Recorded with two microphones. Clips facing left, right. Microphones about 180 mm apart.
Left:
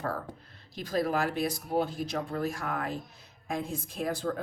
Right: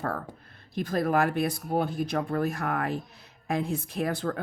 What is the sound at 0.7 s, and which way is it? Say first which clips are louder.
A woman's voice: right 3 dB; 55° right (ahead or behind).